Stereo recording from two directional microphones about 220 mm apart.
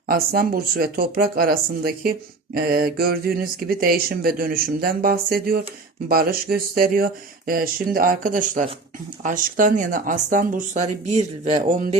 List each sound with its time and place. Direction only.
0.1 s speech: 40° right (ahead or behind)